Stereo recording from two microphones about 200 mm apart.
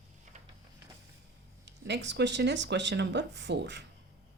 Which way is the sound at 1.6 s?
60° right (ahead or behind).